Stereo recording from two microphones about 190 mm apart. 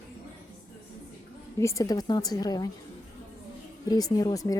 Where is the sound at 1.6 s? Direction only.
15° left (ahead or behind).